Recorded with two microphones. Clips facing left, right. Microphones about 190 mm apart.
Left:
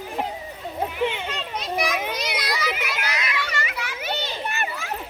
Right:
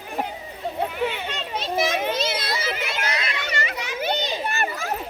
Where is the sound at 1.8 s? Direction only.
25° right (ahead or behind).